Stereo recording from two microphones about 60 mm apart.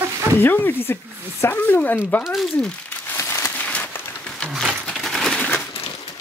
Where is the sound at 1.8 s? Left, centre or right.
Left.